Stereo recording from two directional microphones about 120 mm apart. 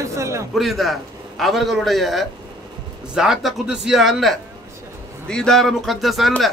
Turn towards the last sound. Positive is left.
turn(degrees=0)  # may be behind; listen again after turning